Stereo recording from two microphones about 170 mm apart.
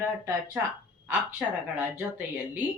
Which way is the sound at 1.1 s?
10° right (ahead or behind).